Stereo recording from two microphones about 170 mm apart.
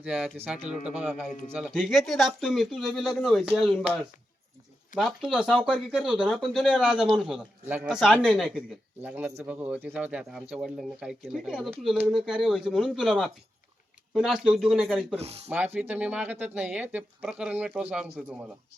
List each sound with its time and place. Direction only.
0.0 s speech: 5° right (ahead or behind)
15.1 s speech: 35° right (ahead or behind)
15.4 s speech: 10° right (ahead or behind)